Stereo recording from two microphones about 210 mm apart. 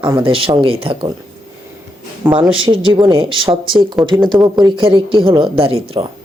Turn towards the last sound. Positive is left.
turn(degrees=-25)  # may be behind; listen again after turning